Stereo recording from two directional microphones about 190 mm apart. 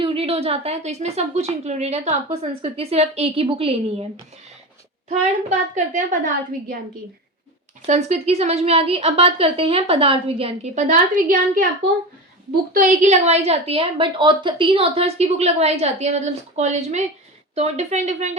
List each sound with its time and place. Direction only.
0.0 s a woman's voice: 30° right (ahead or behind)
5.0 s a woman's voice: 35° right (ahead or behind)
7.9 s a woman's voice: 35° right (ahead or behind)
12.7 s a woman's voice: 40° right (ahead or behind)